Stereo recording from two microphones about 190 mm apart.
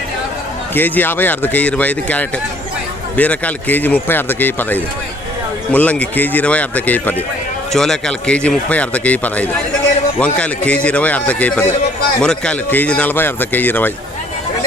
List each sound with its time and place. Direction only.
0.7 s a man's voice: 10° left (ahead or behind)